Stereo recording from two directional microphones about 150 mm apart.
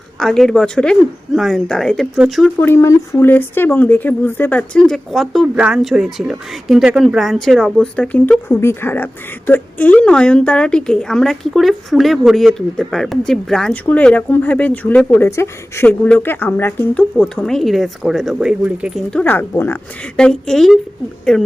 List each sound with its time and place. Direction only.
0.2 s a woman's voice: 5° left (ahead or behind)
2.6 s a woman's voice: 15° left (ahead or behind); by 19.0 s 5° right (ahead or behind)
19.1 s speech: 10° left (ahead or behind)
20.1 s a woman's voice: 5° left (ahead or behind)